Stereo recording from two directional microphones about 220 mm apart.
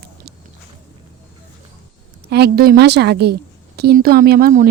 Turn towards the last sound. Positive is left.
turn(degrees=-40)  # may be behind; listen again after turning